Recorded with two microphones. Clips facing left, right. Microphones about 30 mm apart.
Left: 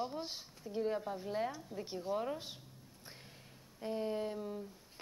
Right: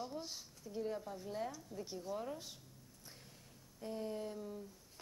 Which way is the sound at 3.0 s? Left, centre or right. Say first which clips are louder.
Left 4 dB; left.